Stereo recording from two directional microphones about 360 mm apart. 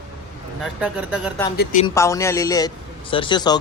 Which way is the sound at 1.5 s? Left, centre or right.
Left.